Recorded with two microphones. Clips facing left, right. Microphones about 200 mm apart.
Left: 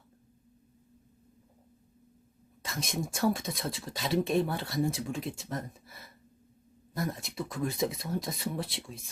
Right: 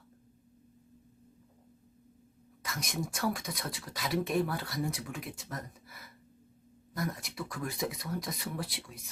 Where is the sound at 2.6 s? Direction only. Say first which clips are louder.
Left 2 dB; 25° left (ahead or behind).